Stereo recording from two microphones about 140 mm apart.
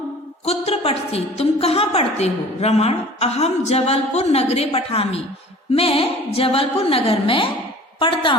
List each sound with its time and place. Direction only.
0.4 s a woman's voice: 45° left (ahead or behind)